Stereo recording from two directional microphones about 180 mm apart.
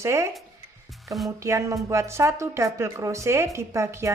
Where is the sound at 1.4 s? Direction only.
15° right (ahead or behind).